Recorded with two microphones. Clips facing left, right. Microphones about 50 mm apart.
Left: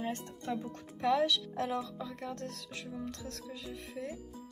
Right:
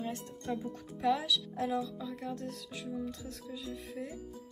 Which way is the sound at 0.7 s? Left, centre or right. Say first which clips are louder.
Even; left.